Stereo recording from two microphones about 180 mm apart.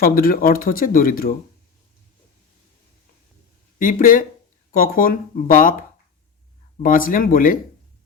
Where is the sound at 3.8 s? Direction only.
50° left (ahead or behind).